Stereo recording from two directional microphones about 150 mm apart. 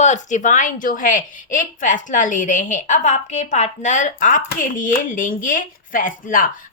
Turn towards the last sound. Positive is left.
turn(degrees=65)  # may be behind; listen again after turning